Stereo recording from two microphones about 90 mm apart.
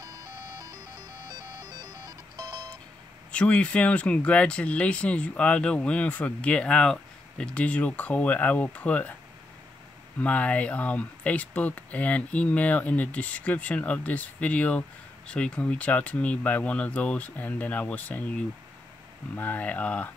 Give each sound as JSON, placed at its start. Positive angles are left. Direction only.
{"t": 0.0, "sound": "music", "side_deg": -45}
{"t": 3.3, "sound": "speech", "side_deg": 15}
{"t": 10.2, "sound": "speech", "side_deg": 15}
{"t": 19.3, "sound": "speech", "side_deg": 20}